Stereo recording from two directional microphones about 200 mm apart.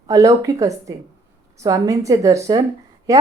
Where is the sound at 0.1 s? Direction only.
15° right (ahead or behind).